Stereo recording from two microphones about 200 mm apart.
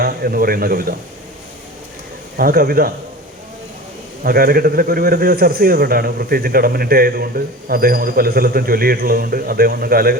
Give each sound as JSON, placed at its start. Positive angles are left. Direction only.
{"t": 0.0, "sound": "speech", "side_deg": -45}
{"t": 2.3, "sound": "a man's voice", "side_deg": -50}
{"t": 4.2, "sound": "a man's voice", "side_deg": -50}